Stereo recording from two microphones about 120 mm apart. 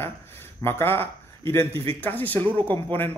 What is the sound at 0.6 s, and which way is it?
Speech, 20° left (ahead or behind).